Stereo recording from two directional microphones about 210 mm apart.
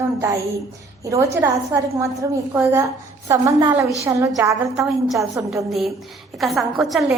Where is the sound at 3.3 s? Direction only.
15° right (ahead or behind).